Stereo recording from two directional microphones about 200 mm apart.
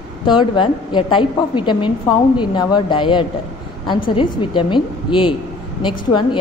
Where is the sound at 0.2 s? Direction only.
25° left (ahead or behind).